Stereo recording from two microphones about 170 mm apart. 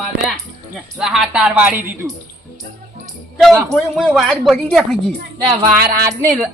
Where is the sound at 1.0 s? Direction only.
5° right (ahead or behind).